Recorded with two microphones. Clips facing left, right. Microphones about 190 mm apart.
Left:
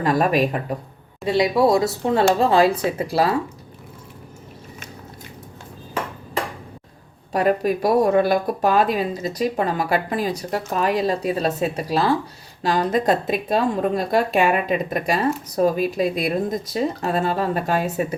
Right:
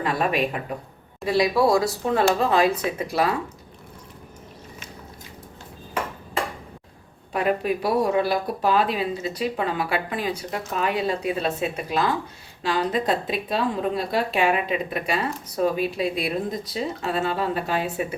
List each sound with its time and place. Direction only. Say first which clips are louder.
0.0 s speech: left 5 dB; 40° left (ahead or behind)
1.2 s speech: left 2 dB; 20° left (ahead or behind)
7.3 s a woman's voice: left 4 dB; 40° left (ahead or behind)